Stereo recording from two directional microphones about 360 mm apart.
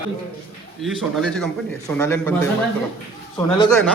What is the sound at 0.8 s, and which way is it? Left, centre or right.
Speech, centre.